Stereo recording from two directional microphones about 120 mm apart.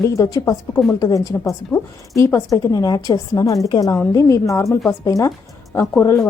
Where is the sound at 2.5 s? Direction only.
30° left (ahead or behind).